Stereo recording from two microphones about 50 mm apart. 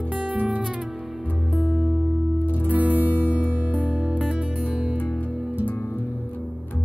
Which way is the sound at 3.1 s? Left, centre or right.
Left.